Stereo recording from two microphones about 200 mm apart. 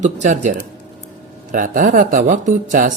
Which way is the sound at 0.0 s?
35° right (ahead or behind).